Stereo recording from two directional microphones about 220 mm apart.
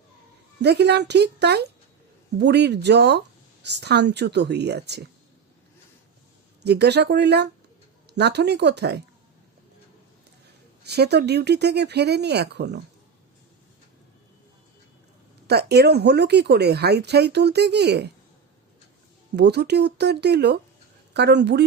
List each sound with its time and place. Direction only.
0.6 s speech: 50° right (ahead or behind)
6.6 s speech: 50° right (ahead or behind)
10.8 s speech: 50° right (ahead or behind)
15.4 s speech: 45° right (ahead or behind)
19.4 s speech: 50° right (ahead or behind)